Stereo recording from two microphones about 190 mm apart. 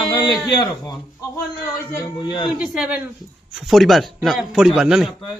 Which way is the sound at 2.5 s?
5° right (ahead or behind).